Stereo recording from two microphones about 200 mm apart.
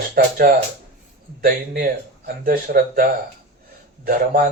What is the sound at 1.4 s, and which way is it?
Speech, 50° right (ahead or behind).